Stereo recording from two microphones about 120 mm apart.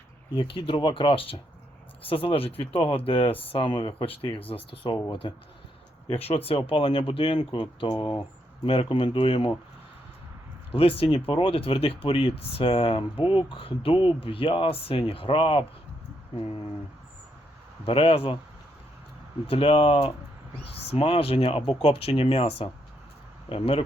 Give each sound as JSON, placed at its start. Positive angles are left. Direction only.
{"t": 0.3, "sound": "speech", "side_deg": 45}
{"t": 8.6, "sound": "speech", "side_deg": 50}
{"t": 10.7, "sound": "speech", "side_deg": 50}
{"t": 17.8, "sound": "speech", "side_deg": 50}
{"t": 19.5, "sound": "speech", "side_deg": 50}